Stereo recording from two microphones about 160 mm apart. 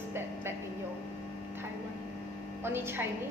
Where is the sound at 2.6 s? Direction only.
15° right (ahead or behind).